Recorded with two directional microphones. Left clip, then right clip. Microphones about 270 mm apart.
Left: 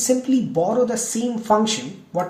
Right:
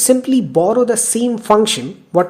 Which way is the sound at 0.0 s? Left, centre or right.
Right.